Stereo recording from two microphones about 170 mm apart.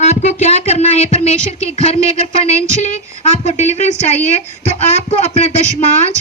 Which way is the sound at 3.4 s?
40° left (ahead or behind).